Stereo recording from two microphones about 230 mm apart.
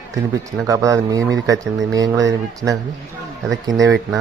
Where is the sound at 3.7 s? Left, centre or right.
Right.